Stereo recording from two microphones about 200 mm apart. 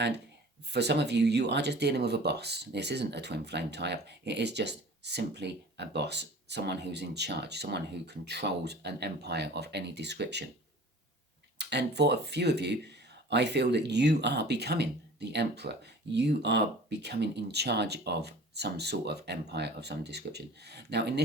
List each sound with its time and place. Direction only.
0.7 s speech: 55° right (ahead or behind)
11.5 s speech: 60° right (ahead or behind)